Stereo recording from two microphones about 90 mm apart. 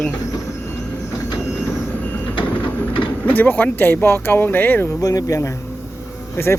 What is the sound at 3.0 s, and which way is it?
Speech, 20° left (ahead or behind).